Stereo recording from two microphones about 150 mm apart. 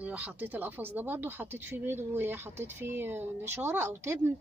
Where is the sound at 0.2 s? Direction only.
10° right (ahead or behind).